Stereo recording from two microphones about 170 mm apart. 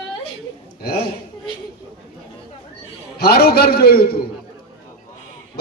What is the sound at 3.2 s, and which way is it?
Speech, 65° left (ahead or behind).